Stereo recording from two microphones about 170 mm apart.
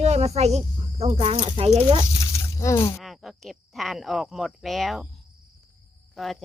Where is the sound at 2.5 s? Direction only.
15° left (ahead or behind).